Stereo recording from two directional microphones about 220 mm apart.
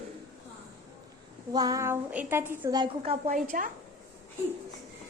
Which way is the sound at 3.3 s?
35° right (ahead or behind).